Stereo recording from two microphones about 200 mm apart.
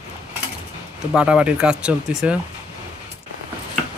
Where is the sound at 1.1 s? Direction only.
5° right (ahead or behind).